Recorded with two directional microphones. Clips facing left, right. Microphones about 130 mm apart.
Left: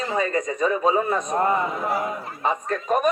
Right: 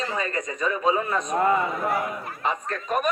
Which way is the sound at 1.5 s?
25° left (ahead or behind).